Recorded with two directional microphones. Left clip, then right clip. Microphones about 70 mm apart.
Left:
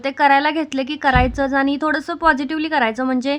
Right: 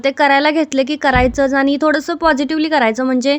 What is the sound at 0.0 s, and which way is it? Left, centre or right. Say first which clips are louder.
A woman's voice: right 3 dB; right.